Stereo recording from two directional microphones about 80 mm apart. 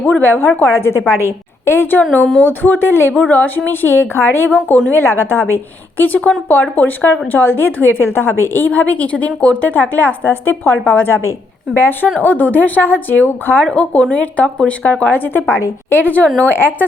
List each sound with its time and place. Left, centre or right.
0.0 s a woman's voice: left
13.7 s a woman's voice: centre